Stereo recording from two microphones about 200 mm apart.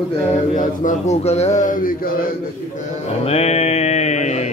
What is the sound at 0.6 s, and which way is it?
A man's voice, 35° left (ahead or behind).